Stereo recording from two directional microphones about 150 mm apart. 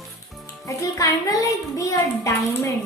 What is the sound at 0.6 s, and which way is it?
A child's voice, 20° left (ahead or behind).